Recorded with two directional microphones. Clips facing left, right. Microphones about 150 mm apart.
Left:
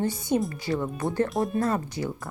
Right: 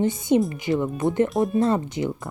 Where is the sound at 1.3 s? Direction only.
Centre (ahead or behind).